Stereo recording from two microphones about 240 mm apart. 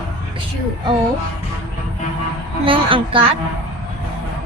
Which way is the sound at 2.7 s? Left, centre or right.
Right.